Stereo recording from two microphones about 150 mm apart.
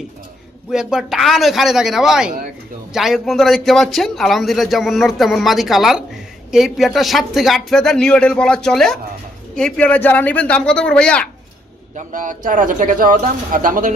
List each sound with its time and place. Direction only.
0.7 s a man's voice: 5° right (ahead or behind)
11.9 s speech: 60° right (ahead or behind)